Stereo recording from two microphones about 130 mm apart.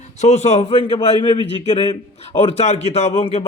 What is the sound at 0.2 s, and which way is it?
Speech, 60° left (ahead or behind).